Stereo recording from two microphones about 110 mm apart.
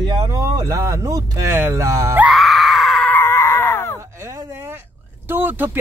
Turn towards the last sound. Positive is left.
turn(degrees=-20)  # may be behind; listen again after turning